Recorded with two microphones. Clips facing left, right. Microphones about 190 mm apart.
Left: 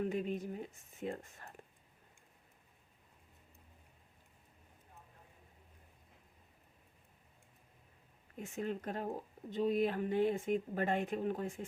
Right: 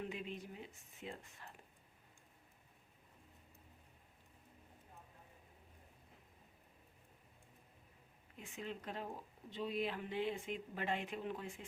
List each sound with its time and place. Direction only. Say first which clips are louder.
0.0 s speech: left 9 dB; 45° left (ahead or behind)
8.4 s speech: left 8 dB; 45° left (ahead or behind)